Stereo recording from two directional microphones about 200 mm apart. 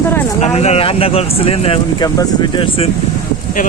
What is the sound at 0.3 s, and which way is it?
Speech, 35° left (ahead or behind).